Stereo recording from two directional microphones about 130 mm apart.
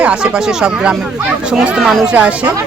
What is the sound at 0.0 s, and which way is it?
Speech, 10° right (ahead or behind).